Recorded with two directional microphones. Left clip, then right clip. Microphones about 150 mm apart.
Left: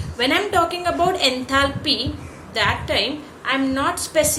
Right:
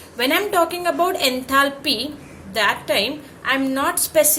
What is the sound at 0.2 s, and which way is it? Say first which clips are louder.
A woman's voice: even; 45° right (ahead or behind).